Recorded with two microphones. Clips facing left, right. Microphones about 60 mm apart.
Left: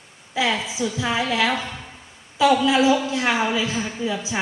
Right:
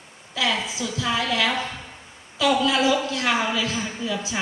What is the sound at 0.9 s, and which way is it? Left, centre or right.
A woman's voice, left.